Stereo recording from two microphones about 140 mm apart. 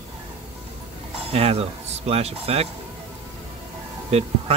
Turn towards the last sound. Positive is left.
turn(degrees=-50)  # may be behind; listen again after turning